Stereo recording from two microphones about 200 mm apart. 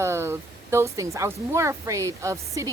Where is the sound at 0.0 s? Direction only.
15° right (ahead or behind).